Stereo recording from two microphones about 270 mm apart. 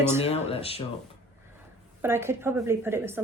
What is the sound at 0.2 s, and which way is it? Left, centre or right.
Speech, left.